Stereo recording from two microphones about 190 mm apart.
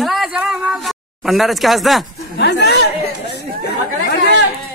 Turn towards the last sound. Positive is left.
turn(degrees=60)  # may be behind; listen again after turning